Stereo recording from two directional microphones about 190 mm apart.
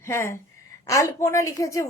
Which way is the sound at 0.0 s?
15° left (ahead or behind).